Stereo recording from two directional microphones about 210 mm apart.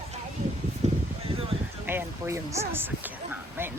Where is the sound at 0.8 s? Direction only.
30° right (ahead or behind).